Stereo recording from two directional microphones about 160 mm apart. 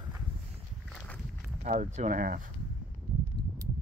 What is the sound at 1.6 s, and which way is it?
Speech, 50° right (ahead or behind).